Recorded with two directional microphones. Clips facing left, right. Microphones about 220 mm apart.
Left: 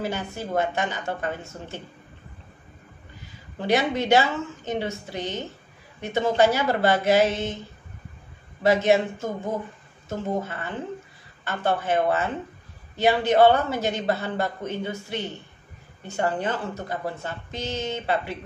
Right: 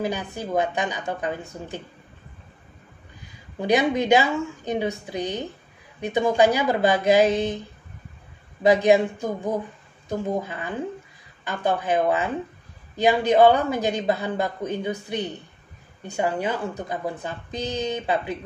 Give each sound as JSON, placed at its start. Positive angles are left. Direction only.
{"t": 0.0, "sound": "a man's voice", "side_deg": -15}
{"t": 3.5, "sound": "a man's voice", "side_deg": -15}
{"t": 8.6, "sound": "a man's voice", "side_deg": -15}